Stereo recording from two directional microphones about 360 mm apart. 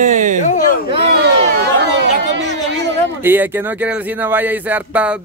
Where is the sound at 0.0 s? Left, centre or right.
Centre.